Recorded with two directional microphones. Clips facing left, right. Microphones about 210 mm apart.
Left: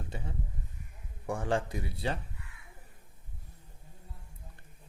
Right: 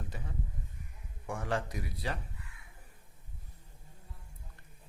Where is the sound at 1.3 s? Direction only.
30° left (ahead or behind).